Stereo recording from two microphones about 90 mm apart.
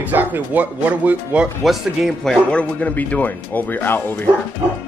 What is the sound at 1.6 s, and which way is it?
Speech, centre (ahead or behind).